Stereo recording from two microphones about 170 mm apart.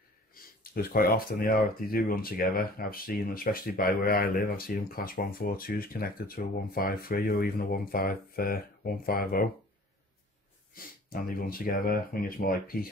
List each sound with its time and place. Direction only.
0.3 s speech: 60° left (ahead or behind)
10.7 s speech: 60° left (ahead or behind)